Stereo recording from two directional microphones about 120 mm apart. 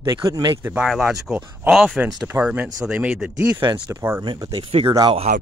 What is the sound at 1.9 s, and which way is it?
Speech, 15° right (ahead or behind).